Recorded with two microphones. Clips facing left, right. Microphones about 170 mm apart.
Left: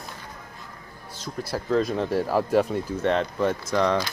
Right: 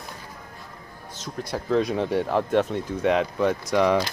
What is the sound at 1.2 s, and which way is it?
Speech, 5° left (ahead or behind).